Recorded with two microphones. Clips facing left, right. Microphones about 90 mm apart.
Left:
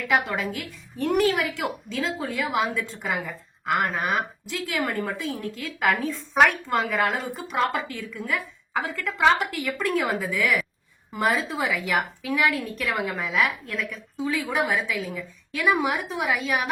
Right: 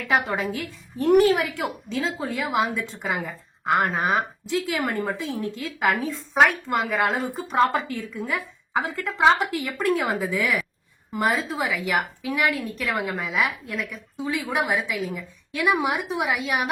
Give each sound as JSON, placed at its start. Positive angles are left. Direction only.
{"t": 0.1, "sound": "a woman's voice", "side_deg": -25}
{"t": 7.3, "sound": "a woman's voice", "side_deg": -30}